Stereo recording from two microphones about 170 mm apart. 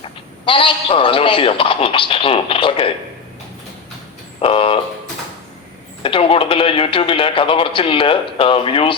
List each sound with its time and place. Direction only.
0.0 s a man's voice: 30° left (ahead or behind)
4.4 s speech: 35° left (ahead or behind)
6.0 s a man's voice: 30° left (ahead or behind)